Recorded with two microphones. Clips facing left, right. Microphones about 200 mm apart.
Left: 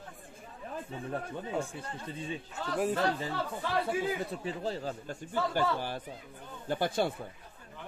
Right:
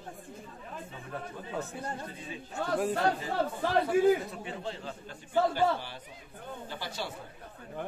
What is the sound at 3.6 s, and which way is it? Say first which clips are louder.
Speech: right 6 dB; 50° right (ahead or behind).